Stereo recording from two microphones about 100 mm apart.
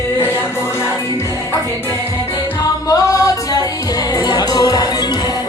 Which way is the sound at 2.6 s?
35° left (ahead or behind).